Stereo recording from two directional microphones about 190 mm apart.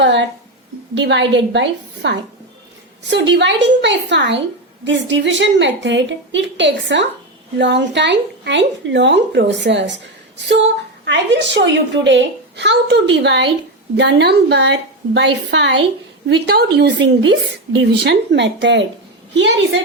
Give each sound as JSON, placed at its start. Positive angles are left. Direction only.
{"t": 0.0, "sound": "a woman's voice", "side_deg": -70}